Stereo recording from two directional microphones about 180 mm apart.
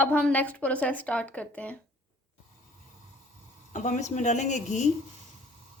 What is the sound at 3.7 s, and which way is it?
Speech, 45° left (ahead or behind).